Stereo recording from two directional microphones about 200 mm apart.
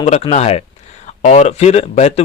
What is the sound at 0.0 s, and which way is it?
A man's voice, 30° left (ahead or behind).